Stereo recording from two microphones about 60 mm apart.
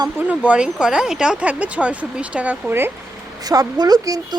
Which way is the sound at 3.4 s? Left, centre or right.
Right.